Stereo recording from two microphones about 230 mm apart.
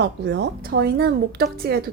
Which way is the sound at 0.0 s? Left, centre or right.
Right.